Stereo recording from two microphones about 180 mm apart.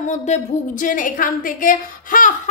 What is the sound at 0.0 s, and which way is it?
A woman's voice, 40° left (ahead or behind).